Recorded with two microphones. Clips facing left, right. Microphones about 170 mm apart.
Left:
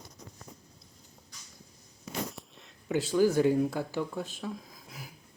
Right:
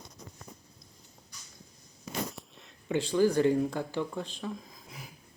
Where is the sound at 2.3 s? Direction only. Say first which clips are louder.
Even; centre (ahead or behind).